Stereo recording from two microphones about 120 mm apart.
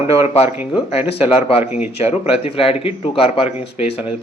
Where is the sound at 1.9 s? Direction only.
60° left (ahead or behind).